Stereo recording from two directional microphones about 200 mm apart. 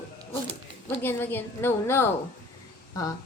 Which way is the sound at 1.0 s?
10° left (ahead or behind).